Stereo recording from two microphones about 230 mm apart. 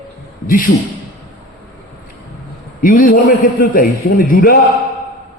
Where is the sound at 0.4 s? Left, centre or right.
Left.